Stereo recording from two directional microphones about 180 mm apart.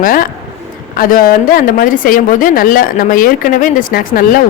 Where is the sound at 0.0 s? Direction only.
50° left (ahead or behind).